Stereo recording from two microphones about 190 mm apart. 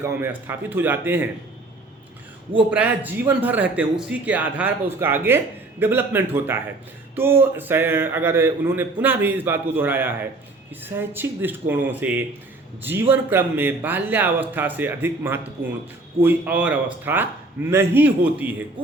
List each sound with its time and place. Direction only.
0.0 s a man's voice: 10° right (ahead or behind)
2.6 s a man's voice: 5° right (ahead or behind)